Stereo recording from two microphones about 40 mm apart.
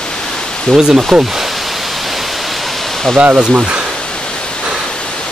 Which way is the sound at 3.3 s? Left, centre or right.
Right.